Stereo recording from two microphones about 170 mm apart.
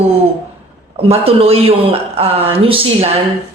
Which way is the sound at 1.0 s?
35° right (ahead or behind).